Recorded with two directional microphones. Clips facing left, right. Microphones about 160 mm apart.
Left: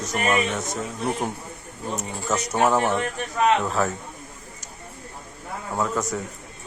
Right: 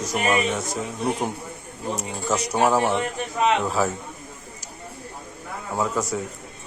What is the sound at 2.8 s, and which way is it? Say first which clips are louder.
Speech: right 1 dB; 15° right (ahead or behind).